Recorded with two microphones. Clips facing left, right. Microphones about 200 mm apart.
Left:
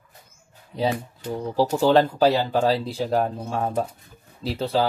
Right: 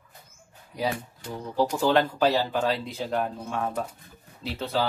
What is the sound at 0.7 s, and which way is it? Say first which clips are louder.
Speech: left 5 dB; 30° left (ahead or behind).